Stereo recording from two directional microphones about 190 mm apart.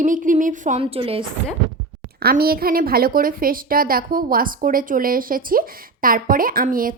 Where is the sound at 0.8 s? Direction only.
30° right (ahead or behind).